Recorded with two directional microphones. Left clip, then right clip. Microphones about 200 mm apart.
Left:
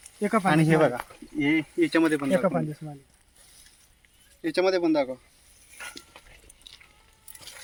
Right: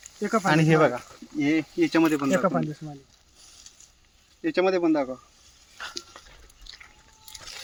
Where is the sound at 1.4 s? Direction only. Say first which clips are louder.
Even; 60° right (ahead or behind).